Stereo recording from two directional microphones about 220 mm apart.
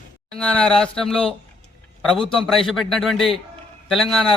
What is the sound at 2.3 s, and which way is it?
A man's voice, centre (ahead or behind).